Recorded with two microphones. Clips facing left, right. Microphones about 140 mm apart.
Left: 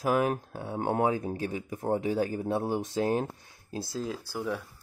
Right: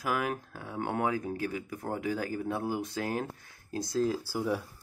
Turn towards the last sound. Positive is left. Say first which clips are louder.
# right 2 dB
turn(degrees=-10)  # may be behind; listen again after turning